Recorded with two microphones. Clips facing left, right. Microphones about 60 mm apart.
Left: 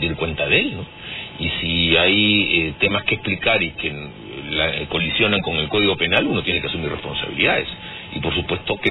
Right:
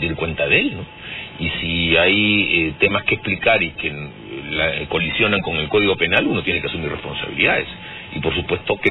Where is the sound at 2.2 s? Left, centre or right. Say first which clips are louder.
Even; centre.